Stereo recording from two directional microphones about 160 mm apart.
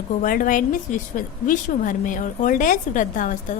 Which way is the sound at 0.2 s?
60° left (ahead or behind).